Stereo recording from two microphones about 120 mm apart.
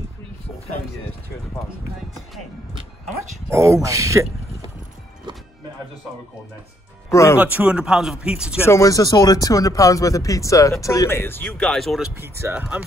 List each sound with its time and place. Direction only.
2.0 s speech: centre (ahead or behind)
3.2 s speech: 25° right (ahead or behind)
7.1 s speech: 25° left (ahead or behind)
7.3 s speech: 15° right (ahead or behind)
8.6 s speech: 25° left (ahead or behind)
11.5 s speech: 5° left (ahead or behind)
12.2 s speech: 20° right (ahead or behind)
12.5 s speech: 10° right (ahead or behind)